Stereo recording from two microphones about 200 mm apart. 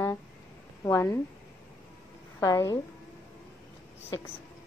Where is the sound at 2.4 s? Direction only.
15° left (ahead or behind).